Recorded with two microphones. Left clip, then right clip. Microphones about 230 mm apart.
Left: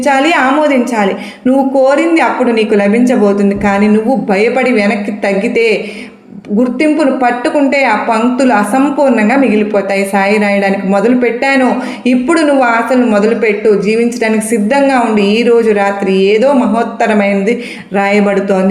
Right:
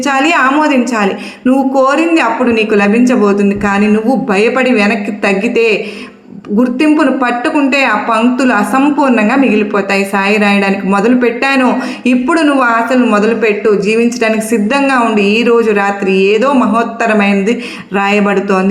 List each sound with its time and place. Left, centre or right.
0.0 s a woman's voice: right